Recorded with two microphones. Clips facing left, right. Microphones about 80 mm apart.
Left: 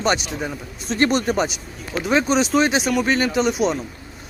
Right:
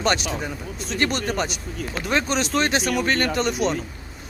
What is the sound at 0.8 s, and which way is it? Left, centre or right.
Speech, left.